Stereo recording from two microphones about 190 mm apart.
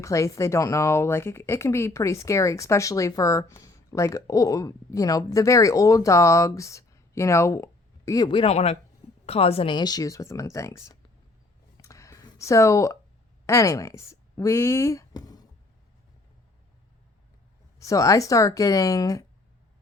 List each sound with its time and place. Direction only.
0.0 s speech: 15° left (ahead or behind)
11.8 s a sound: 15° left (ahead or behind)
13.5 s speech: 15° left (ahead or behind)
17.7 s speech: 15° left (ahead or behind)